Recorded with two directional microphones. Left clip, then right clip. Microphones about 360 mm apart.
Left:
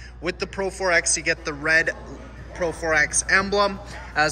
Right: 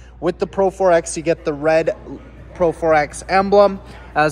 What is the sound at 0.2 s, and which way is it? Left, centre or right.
Speech, right.